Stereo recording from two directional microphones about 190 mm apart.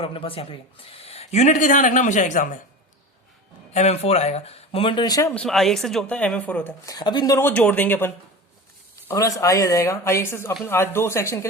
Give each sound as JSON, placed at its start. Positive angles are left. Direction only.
{"t": 0.0, "sound": "speech", "side_deg": 30}
{"t": 3.7, "sound": "speech", "side_deg": 35}
{"t": 5.3, "sound": "speech", "side_deg": 5}